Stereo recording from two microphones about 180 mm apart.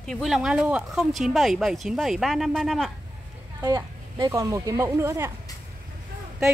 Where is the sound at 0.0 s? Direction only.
Centre (ahead or behind).